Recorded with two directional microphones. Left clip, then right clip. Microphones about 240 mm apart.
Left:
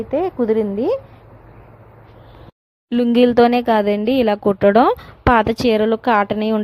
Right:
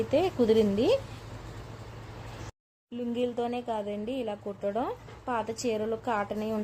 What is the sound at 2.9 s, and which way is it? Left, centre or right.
Speech, left.